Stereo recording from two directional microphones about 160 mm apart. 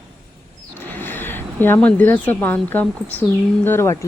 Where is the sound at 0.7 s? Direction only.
10° left (ahead or behind).